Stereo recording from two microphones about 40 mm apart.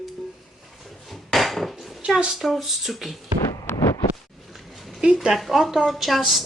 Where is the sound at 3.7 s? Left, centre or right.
Left.